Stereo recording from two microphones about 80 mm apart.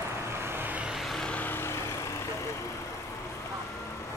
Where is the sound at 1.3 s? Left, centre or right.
Left.